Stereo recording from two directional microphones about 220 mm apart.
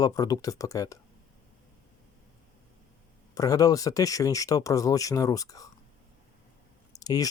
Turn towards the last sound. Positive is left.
turn(degrees=15)  # may be behind; listen again after turning